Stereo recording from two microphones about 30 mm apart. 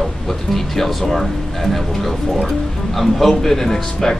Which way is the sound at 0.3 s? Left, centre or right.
Centre.